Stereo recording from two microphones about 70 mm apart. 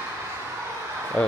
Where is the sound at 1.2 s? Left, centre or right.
Left.